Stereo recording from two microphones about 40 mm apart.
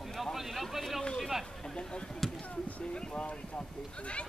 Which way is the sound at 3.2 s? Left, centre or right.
Left.